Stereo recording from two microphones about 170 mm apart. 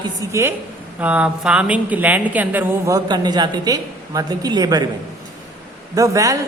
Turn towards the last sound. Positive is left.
turn(degrees=-20)  # may be behind; listen again after turning